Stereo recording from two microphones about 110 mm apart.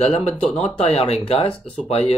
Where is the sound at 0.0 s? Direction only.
70° left (ahead or behind).